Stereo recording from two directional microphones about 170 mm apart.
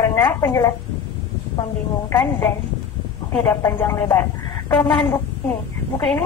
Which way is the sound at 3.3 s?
10° left (ahead or behind).